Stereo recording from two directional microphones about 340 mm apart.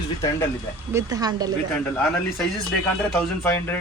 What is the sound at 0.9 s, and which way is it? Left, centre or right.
Speech, centre.